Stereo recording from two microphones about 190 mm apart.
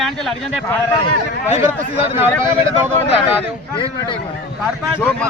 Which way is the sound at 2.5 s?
30° left (ahead or behind).